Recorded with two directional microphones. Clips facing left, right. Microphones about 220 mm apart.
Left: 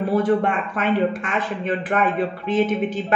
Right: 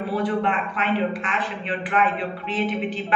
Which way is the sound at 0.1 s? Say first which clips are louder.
Left 4 dB; 45° left (ahead or behind).